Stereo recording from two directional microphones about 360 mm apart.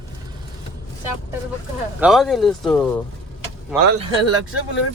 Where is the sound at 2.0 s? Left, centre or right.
Centre.